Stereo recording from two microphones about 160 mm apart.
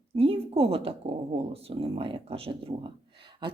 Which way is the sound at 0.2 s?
35° right (ahead or behind).